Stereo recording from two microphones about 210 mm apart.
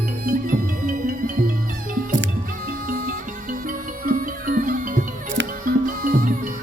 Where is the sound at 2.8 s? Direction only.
40° right (ahead or behind).